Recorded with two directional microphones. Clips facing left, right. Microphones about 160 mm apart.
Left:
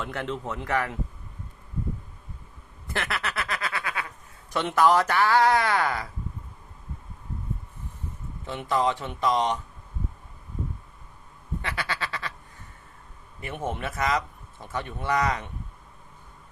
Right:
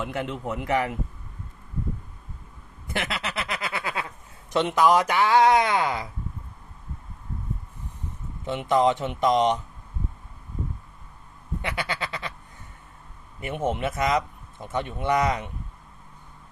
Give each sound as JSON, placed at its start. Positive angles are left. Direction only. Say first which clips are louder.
{"t": 0.0, "sound": "a man's voice", "louder": "right 2 dB", "side_deg": -10}
{"t": 2.8, "sound": "snicker", "louder": "right 1 dB", "side_deg": -20}
{"t": 4.5, "sound": "speech", "louder": "right 1 dB", "side_deg": -15}
{"t": 8.4, "sound": "speech", "louder": "right 4 dB", "side_deg": -20}
{"t": 11.6, "sound": "speech", "louder": "right 2 dB", "side_deg": -20}
{"t": 13.4, "sound": "speech", "louder": "right 5 dB", "side_deg": -20}